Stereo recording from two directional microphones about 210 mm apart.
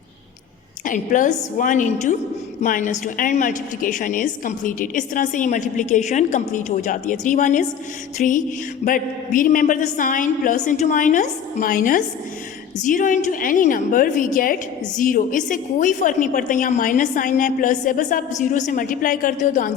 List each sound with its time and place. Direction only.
0.9 s a woman's voice: 40° left (ahead or behind)